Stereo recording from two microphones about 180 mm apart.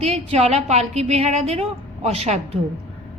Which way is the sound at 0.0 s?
35° right (ahead or behind).